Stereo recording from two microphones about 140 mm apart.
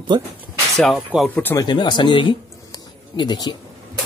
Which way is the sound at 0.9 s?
Centre (ahead or behind).